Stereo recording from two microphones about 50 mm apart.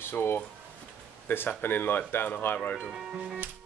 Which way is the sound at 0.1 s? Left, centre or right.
Left.